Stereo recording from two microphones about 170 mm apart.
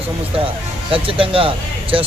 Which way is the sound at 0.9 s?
30° right (ahead or behind).